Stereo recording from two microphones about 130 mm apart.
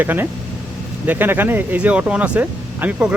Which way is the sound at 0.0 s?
15° right (ahead or behind).